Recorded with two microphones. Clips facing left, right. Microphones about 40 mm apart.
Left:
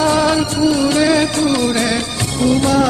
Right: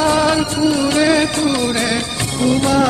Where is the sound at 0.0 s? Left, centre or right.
Centre.